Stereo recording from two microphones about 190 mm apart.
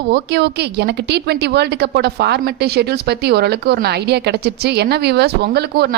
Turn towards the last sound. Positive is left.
turn(degrees=-60)  # may be behind; listen again after turning